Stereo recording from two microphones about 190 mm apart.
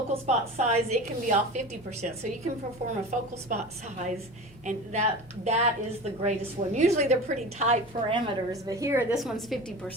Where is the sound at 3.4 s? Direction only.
35° right (ahead or behind).